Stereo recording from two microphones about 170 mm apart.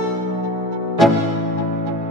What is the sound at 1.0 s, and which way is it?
Music, centre (ahead or behind).